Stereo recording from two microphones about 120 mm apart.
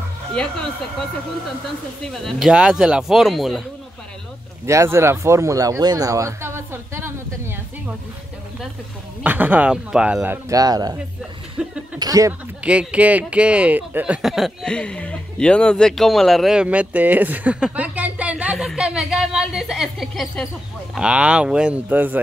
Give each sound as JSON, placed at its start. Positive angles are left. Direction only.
{"t": 0.3, "sound": "speech", "side_deg": 5}
{"t": 2.1, "sound": "a woman's voice", "side_deg": 0}
{"t": 4.6, "sound": "speech", "side_deg": -25}
{"t": 9.2, "sound": "speech", "side_deg": -15}
{"t": 10.5, "sound": "speech", "side_deg": -30}
{"t": 11.6, "sound": "chuckle", "side_deg": -10}
{"t": 12.0, "sound": "speech", "side_deg": -30}
{"t": 12.6, "sound": "a woman's voice", "side_deg": -10}